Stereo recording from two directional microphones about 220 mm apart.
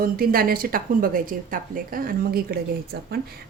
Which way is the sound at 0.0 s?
40° right (ahead or behind).